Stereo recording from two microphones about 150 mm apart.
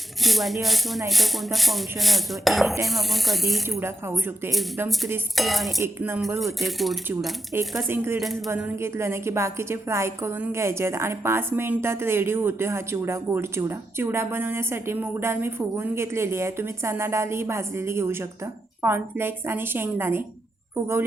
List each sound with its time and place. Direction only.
0.2 s speech: centre (ahead or behind)
5.4 s speech: centre (ahead or behind)
5.8 s speech: 10° right (ahead or behind)
7.9 s a woman's voice: 15° right (ahead or behind)